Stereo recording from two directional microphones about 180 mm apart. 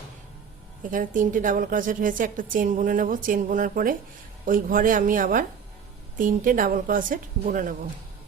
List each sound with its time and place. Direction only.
0.8 s a woman's voice: 45° right (ahead or behind)